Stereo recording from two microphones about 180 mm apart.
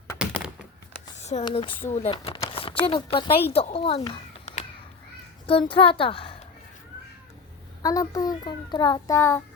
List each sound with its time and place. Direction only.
1.2 s a sound: 40° left (ahead or behind)
1.5 s a child's voice: 30° left (ahead or behind)
7.8 s a child's voice: 20° left (ahead or behind)